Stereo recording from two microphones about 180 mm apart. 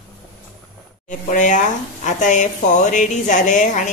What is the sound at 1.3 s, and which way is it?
A woman's voice, 45° left (ahead or behind).